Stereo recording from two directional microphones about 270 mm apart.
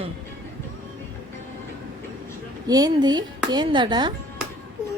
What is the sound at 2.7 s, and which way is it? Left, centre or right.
Speech, centre.